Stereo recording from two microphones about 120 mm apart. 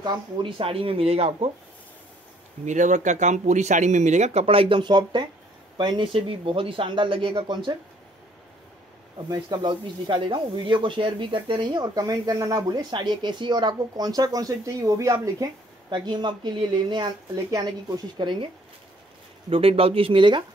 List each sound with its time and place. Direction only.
0.0 s speech: 40° right (ahead or behind); by 1.5 s 55° right (ahead or behind)
2.6 s speech: 90° right; by 7.7 s 40° right (ahead or behind)
9.3 s speech: 40° right (ahead or behind)
15.9 s speech: 40° right (ahead or behind)
19.5 s speech: 50° right (ahead or behind)